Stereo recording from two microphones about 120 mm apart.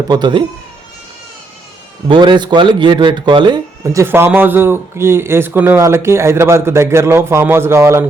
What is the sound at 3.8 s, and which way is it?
Speech, 20° right (ahead or behind).